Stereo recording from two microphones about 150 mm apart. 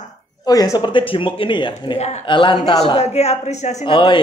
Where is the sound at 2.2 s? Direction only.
35° left (ahead or behind); by 3.8 s 50° left (ahead or behind).